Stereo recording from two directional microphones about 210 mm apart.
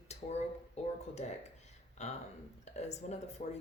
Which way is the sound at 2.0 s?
30° left (ahead or behind).